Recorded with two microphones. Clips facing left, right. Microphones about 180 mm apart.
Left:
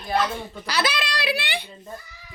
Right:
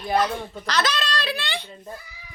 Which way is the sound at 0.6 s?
10° left (ahead or behind).